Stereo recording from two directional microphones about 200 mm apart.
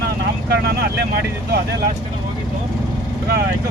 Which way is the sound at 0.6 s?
55° right (ahead or behind).